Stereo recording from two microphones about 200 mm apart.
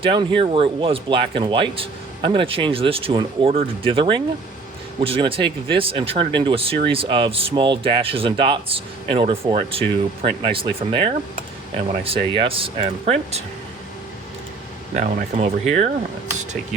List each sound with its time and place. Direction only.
0.0 s speech: 25° right (ahead or behind)
14.9 s speech: 35° right (ahead or behind)